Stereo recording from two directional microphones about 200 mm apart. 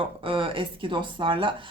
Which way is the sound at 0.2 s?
25° right (ahead or behind).